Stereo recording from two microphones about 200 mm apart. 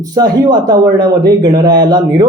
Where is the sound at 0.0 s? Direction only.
20° right (ahead or behind).